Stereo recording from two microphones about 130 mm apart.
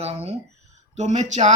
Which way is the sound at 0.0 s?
50° right (ahead or behind).